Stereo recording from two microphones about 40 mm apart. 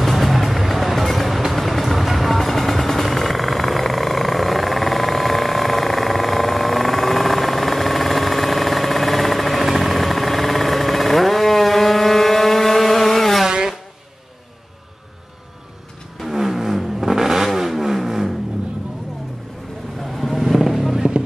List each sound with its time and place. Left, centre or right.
0.0 s music: centre
9.7 s vehicle: centre
13.5 s a sound: centre
16.2 s vehicle: centre
20.0 s vehicle: centre